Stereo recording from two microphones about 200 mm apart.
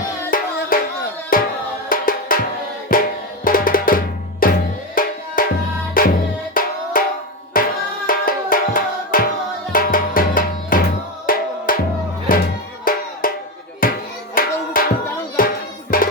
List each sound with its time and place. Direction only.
0.3 s music: 45° left (ahead or behind)
5.0 s tabla: 45° left (ahead or behind)
5.4 s music: 45° left (ahead or behind)